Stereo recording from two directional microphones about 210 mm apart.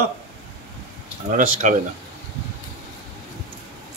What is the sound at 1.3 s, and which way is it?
Speech, 40° right (ahead or behind).